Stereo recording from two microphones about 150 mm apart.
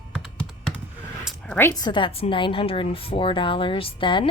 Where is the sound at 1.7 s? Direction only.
30° left (ahead or behind).